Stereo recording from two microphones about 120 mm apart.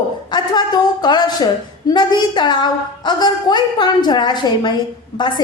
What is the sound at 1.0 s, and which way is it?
A woman's voice, 35° left (ahead or behind).